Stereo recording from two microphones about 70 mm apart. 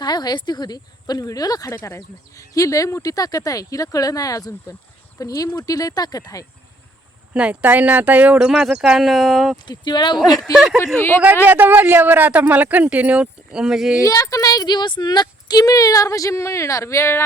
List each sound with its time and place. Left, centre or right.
0.0 s speech: left
1.8 s speech: left
7.3 s speech: centre
8.4 s speech: centre
9.6 s speech: left
10.5 s speech: centre
11.4 s speech: right; by 14.0 s centre
14.0 s speech: left